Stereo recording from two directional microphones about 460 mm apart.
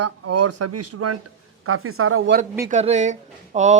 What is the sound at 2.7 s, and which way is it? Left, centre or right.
Speech, centre.